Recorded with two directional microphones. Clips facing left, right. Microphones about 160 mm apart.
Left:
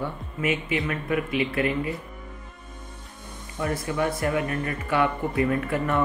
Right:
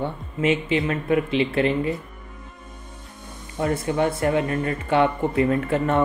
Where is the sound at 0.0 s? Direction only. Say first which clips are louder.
Right 5 dB; 25° right (ahead or behind).